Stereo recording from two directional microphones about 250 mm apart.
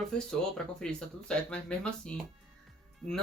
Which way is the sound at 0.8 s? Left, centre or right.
Centre.